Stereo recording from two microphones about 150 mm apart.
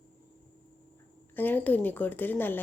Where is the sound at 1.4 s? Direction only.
10° left (ahead or behind).